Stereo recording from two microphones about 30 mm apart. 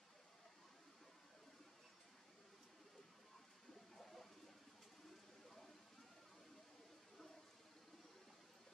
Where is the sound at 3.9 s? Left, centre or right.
Centre.